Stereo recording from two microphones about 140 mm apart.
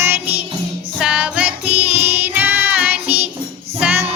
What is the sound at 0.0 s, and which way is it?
Music, 15° right (ahead or behind).